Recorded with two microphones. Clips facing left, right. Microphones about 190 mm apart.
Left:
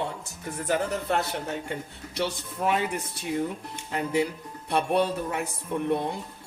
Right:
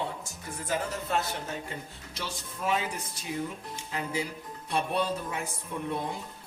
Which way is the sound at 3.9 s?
65° left (ahead or behind).